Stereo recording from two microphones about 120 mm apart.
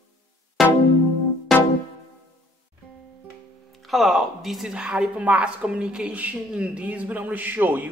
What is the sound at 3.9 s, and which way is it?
A woman's voice, centre (ahead or behind).